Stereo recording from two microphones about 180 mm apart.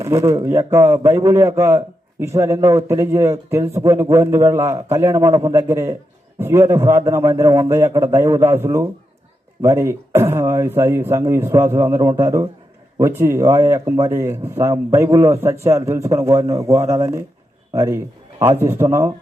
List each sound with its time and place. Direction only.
0.0 s a man's voice: 15° right (ahead or behind)